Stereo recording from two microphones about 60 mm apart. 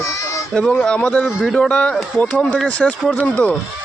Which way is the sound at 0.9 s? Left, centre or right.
Centre.